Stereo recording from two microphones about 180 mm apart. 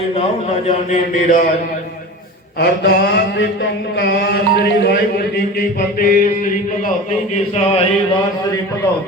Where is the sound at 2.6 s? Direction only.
65° left (ahead or behind).